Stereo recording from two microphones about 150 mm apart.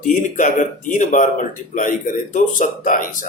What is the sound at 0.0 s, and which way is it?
Speech, 60° left (ahead or behind).